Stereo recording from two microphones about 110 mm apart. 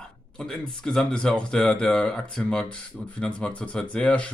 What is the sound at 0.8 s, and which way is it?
Speech, 10° left (ahead or behind).